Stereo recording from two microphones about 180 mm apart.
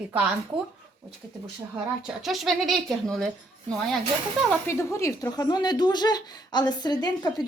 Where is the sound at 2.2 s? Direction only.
Centre (ahead or behind).